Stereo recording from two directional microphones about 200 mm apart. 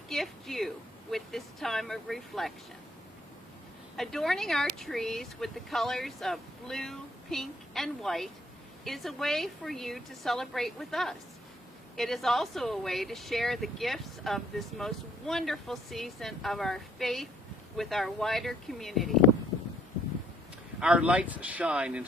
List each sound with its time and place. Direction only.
0.1 s a woman's voice: centre (ahead or behind)
3.9 s speech: centre (ahead or behind)
20.8 s speech: 5° right (ahead or behind)